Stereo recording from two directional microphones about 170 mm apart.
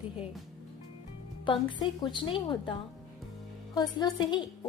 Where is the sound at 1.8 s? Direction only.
25° left (ahead or behind).